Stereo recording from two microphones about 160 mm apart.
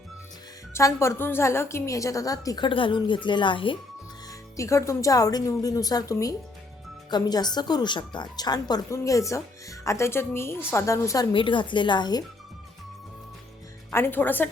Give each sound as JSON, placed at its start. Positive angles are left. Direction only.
{"t": 0.7, "sound": "speech", "side_deg": 20}
{"t": 4.3, "sound": "speech", "side_deg": 20}
{"t": 13.9, "sound": "a woman's voice", "side_deg": 15}